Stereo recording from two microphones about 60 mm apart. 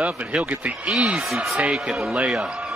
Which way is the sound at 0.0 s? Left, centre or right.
Right.